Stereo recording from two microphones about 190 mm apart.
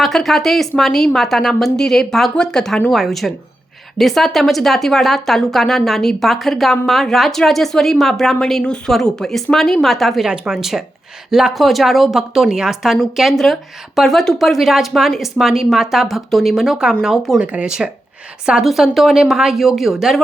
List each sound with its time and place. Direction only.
0.0 s speech: centre (ahead or behind)